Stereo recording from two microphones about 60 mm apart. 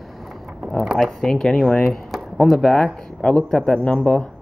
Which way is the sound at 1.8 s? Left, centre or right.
Centre.